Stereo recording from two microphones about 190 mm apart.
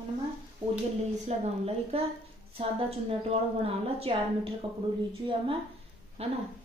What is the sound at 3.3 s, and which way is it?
A woman's voice, 30° right (ahead or behind).